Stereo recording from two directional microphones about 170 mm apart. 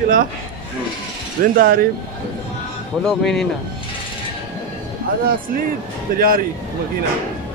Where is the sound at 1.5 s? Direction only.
60° right (ahead or behind).